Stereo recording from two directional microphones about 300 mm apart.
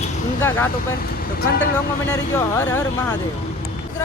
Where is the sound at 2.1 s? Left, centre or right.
Centre.